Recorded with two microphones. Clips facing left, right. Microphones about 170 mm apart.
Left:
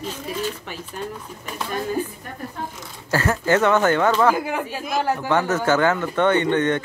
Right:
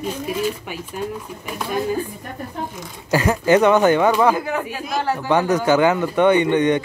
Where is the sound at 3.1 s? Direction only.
15° right (ahead or behind).